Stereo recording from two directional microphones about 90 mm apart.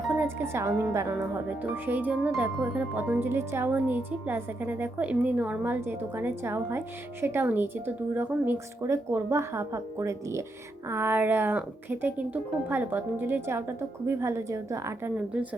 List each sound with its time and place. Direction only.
0.2 s speech: 25° right (ahead or behind)
8.5 s speech: 35° right (ahead or behind)
15.1 s a woman's voice: 15° right (ahead or behind)